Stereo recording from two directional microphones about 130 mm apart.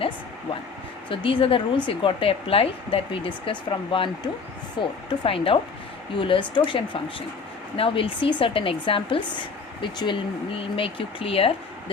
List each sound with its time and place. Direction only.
1.1 s speech: 45° left (ahead or behind)